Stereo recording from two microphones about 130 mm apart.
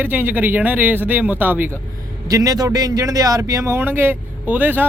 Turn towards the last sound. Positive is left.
turn(degrees=-15)  # may be behind; listen again after turning